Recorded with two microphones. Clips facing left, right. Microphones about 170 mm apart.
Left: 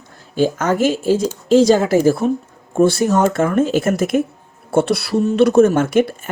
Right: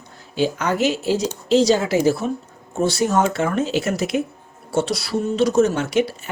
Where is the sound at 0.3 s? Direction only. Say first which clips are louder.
Left 4 dB; 50° left (ahead or behind).